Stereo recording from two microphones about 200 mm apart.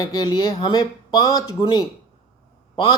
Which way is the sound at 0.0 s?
20° left (ahead or behind).